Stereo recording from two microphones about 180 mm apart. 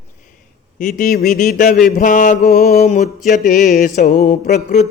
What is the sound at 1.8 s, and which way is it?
Mantra, 45° left (ahead or behind).